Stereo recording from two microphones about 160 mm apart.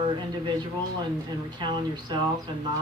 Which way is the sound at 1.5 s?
30° right (ahead or behind).